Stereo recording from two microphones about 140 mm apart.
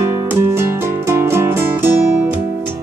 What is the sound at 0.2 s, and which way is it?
Music, 20° right (ahead or behind).